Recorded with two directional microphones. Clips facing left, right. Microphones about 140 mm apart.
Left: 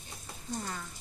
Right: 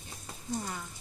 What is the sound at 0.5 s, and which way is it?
Speech, 10° right (ahead or behind).